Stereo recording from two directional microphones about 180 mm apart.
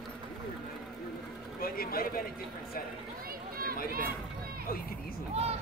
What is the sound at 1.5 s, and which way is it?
Speech, 55° left (ahead or behind).